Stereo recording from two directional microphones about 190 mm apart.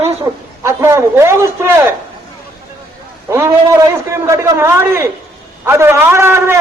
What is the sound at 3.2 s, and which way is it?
A man's voice, 15° right (ahead or behind).